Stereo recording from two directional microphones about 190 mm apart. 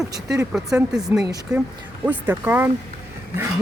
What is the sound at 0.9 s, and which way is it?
Speech, centre (ahead or behind).